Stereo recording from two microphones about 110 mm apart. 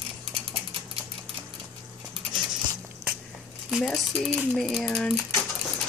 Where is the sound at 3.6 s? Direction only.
Centre (ahead or behind).